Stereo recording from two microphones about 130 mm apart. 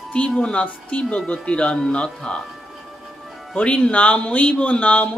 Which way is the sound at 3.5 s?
10° left (ahead or behind).